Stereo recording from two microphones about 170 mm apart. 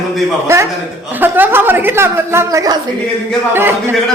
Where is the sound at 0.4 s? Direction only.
15° right (ahead or behind).